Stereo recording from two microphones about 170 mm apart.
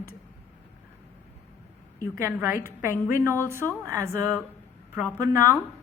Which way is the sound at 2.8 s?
15° right (ahead or behind).